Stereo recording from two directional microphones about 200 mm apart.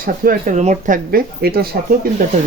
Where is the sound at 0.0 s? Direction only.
40° right (ahead or behind).